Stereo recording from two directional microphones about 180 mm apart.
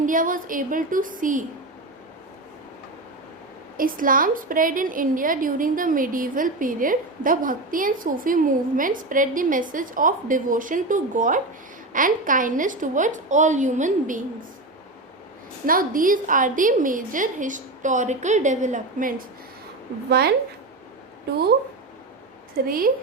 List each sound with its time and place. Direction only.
0.0 s a woman's voice: 50° right (ahead or behind)
3.8 s a woman's voice: 50° right (ahead or behind)
15.6 s a woman's voice: 50° right (ahead or behind)
20.1 s a woman's voice: 60° right (ahead or behind)
22.5 s a woman's voice: 55° right (ahead or behind)